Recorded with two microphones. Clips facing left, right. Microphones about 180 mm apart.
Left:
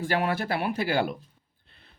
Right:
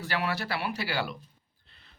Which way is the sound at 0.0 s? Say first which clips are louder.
Left 5 dB; 50° left (ahead or behind).